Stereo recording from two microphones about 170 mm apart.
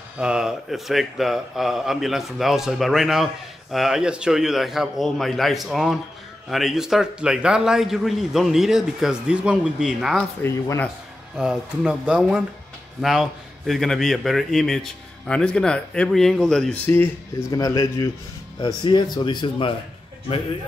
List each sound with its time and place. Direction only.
0.2 s a man's voice: 5° right (ahead or behind)
10.4 s speech: 15° left (ahead or behind)
11.3 s a man's voice: 5° right (ahead or behind); by 19.7 s 30° left (ahead or behind)